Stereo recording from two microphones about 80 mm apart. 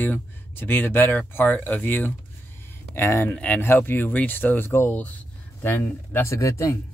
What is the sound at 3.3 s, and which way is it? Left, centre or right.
Speech, centre.